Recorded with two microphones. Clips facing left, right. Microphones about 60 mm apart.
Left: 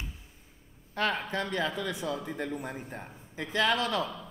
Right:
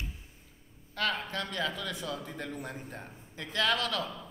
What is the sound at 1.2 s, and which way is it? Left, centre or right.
A man's voice, left.